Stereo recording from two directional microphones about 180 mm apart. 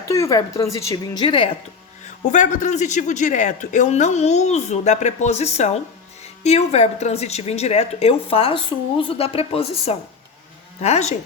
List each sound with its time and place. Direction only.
0.1 s speech: 15° left (ahead or behind)
2.0 s a woman's voice: 45° left (ahead or behind)